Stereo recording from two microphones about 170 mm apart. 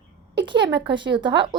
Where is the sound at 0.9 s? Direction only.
90° right.